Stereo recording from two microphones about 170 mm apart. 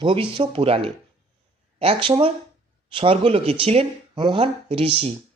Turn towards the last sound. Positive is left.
turn(degrees=-35)  # may be behind; listen again after turning